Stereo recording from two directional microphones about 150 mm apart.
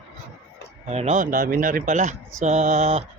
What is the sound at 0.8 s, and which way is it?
Speech, 45° right (ahead or behind).